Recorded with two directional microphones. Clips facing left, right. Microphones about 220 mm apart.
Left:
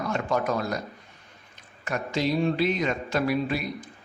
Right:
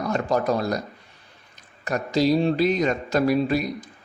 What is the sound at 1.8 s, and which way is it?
A man's voice, 40° right (ahead or behind).